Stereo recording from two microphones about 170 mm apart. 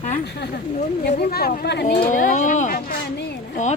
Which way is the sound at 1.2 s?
65° left (ahead or behind).